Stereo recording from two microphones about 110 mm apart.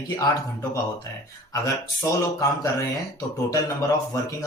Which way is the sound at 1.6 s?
30° left (ahead or behind).